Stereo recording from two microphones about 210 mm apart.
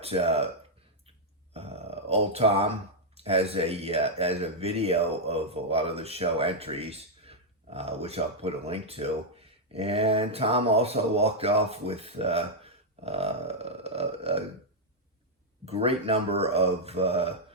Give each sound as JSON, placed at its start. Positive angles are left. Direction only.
{"t": 0.0, "sound": "speech", "side_deg": -30}
{"t": 1.5, "sound": "a sound", "side_deg": -30}
{"t": 3.2, "sound": "speech", "side_deg": -30}
{"t": 15.6, "sound": "speech", "side_deg": -30}